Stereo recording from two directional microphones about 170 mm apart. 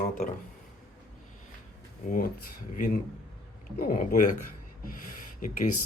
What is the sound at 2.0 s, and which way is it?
Speech, 55° left (ahead or behind).